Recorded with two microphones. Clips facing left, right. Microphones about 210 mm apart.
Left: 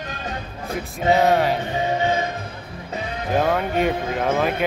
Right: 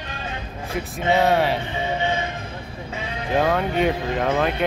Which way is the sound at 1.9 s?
40° left (ahead or behind).